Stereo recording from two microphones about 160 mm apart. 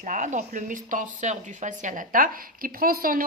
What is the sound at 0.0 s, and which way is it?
Speech, 50° right (ahead or behind).